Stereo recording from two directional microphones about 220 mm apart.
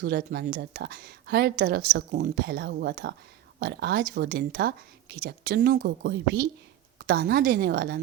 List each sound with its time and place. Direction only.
0.0 s speech: 45° right (ahead or behind)